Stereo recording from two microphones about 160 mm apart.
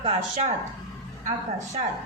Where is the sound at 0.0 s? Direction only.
40° right (ahead or behind).